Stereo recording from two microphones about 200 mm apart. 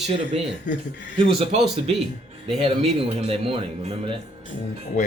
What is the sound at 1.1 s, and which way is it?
Speech, 30° right (ahead or behind).